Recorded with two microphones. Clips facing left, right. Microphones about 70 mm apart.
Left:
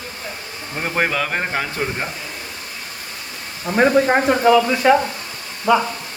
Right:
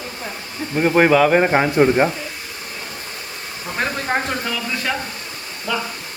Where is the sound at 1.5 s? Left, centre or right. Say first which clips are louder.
Right 9 dB; right.